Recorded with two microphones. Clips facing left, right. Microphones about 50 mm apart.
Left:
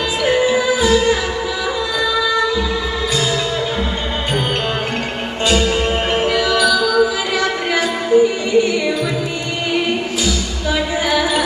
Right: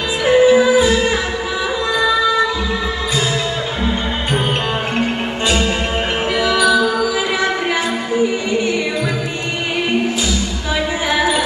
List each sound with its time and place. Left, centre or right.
0.3 s music: right
5.5 s music: right